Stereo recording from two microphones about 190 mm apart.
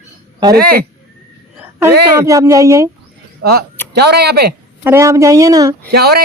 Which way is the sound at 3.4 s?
55° right (ahead or behind).